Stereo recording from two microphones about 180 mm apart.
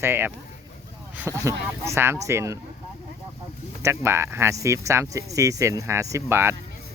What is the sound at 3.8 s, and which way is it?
Speech, 15° right (ahead or behind).